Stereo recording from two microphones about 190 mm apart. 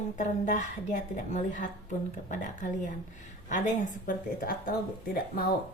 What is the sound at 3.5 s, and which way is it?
Speech, 40° left (ahead or behind).